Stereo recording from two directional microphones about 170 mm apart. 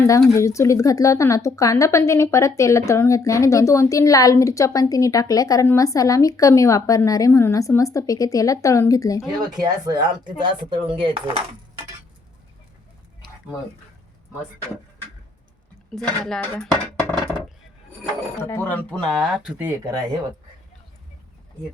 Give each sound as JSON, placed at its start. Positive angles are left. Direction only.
{"t": 0.0, "sound": "speech", "side_deg": 15}
{"t": 9.2, "sound": "speech", "side_deg": -25}
{"t": 16.2, "sound": "speech", "side_deg": 5}
{"t": 18.4, "sound": "speech", "side_deg": 15}